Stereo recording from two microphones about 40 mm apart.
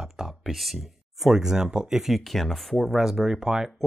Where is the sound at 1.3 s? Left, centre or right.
Centre.